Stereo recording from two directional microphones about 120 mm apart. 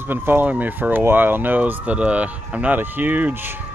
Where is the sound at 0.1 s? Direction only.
15° right (ahead or behind).